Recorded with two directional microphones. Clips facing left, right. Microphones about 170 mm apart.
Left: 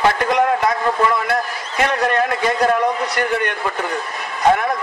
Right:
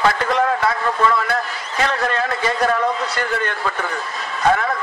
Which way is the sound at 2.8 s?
15° left (ahead or behind).